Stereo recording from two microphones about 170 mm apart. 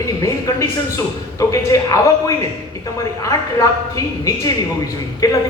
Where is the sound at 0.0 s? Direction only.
20° left (ahead or behind).